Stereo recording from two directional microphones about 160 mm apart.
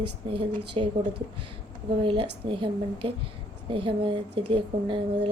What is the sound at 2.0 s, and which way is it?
A woman's voice, 35° right (ahead or behind).